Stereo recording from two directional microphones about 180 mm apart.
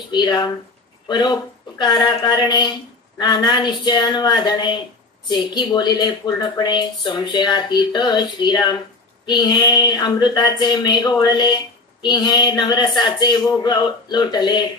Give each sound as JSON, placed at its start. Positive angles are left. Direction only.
{"t": 0.1, "sound": "speech", "side_deg": 25}